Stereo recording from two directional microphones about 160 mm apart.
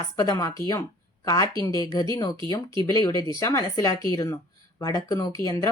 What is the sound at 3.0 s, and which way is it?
A woman's voice, 25° left (ahead or behind).